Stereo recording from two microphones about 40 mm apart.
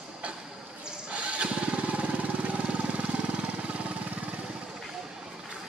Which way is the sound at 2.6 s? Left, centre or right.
Right.